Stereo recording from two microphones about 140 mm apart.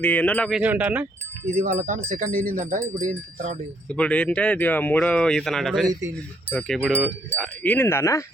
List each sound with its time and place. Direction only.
0.0 s speech: 10° left (ahead or behind)
0.5 s speech: 10° right (ahead or behind)
1.5 s speech: 60° right (ahead or behind)
3.8 s speech: 10° left (ahead or behind)